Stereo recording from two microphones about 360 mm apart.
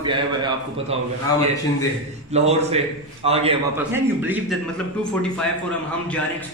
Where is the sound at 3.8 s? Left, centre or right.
Centre.